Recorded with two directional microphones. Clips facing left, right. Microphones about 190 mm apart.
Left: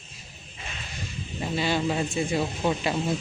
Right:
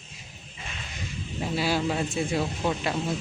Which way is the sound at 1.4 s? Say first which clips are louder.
Even; 5° right (ahead or behind).